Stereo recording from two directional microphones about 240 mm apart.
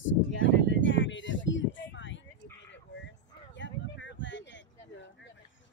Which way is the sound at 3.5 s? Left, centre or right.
Left.